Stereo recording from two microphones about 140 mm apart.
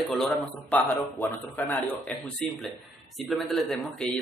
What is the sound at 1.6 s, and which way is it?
Speech, 15° left (ahead or behind).